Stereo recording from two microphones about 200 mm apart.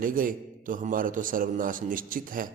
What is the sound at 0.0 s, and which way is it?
A man's voice, 45° right (ahead or behind).